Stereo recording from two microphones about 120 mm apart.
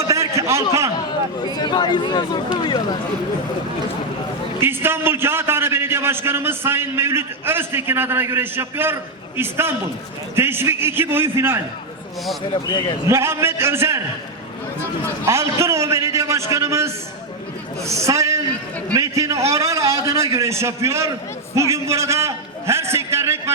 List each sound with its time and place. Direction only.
0.1 s a sound: 25° right (ahead or behind)
1.5 s speech: 35° left (ahead or behind)
4.6 s a man's voice: 20° right (ahead or behind)
12.6 s a man's voice: 45° left (ahead or behind)
13.1 s a man's voice: 20° right (ahead or behind)
15.3 s a man's voice: 25° right (ahead or behind)